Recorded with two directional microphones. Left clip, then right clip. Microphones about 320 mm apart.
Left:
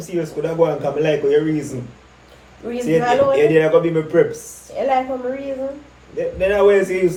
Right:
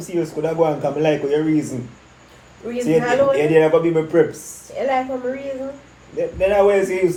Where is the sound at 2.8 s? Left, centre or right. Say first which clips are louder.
Left 1 dB; centre.